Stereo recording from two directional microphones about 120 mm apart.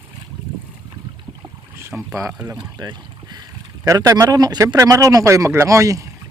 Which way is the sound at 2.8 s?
35° right (ahead or behind).